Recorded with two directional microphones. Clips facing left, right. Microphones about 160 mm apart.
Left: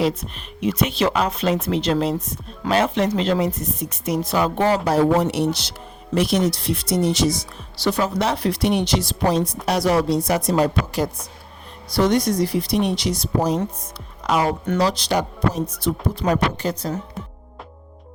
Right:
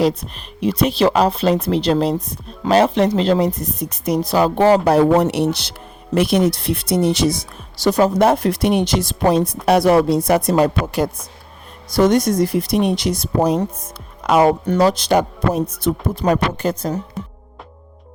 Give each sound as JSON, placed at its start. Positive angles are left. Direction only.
{"t": 0.0, "sound": "speech", "side_deg": -35}
{"t": 4.9, "sound": "speech", "side_deg": -65}
{"t": 17.2, "sound": "speech", "side_deg": 0}